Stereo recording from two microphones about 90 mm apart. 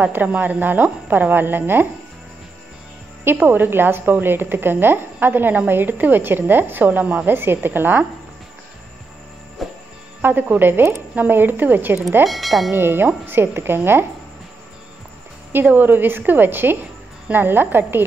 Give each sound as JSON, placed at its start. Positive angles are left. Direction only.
{"t": 0.0, "sound": "a woman's voice", "side_deg": -20}
{"t": 3.3, "sound": "a woman's voice", "side_deg": -25}
{"t": 9.6, "sound": "music", "side_deg": 0}
{"t": 10.2, "sound": "a woman's voice", "side_deg": -20}
{"t": 12.3, "sound": "speech", "side_deg": 0}
{"t": 12.7, "sound": "a woman's voice", "side_deg": -25}
{"t": 15.5, "sound": "a woman's voice", "side_deg": -20}